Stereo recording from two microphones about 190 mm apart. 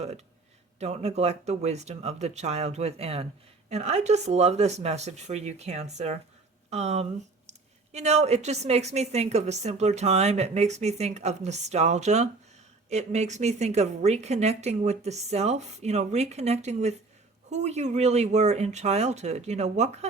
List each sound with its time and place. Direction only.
0.8 s a woman's voice: 35° right (ahead or behind)